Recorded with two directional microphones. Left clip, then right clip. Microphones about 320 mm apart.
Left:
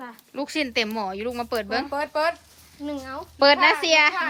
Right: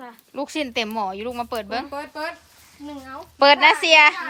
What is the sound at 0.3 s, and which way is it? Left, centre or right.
Speech, centre.